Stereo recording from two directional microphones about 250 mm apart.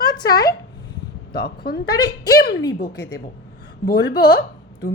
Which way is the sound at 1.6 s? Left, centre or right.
Left.